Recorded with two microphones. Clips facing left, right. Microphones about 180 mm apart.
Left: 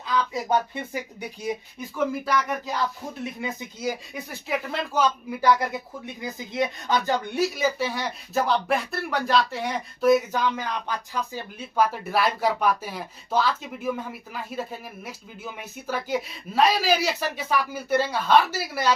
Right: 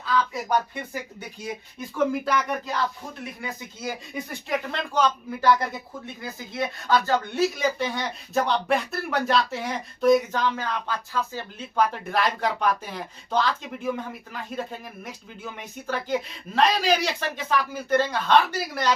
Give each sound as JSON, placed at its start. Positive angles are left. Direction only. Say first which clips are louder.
{"t": 0.0, "sound": "a sound", "louder": "right 1 dB", "side_deg": 20}
{"t": 2.2, "sound": "speech", "louder": "even", "side_deg": 5}
{"t": 3.2, "sound": "speech", "louder": "left 4 dB", "side_deg": 20}
{"t": 4.1, "sound": "speech", "louder": "right 1 dB", "side_deg": 5}